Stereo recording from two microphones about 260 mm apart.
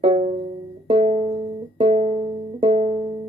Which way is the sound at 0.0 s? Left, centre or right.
Centre.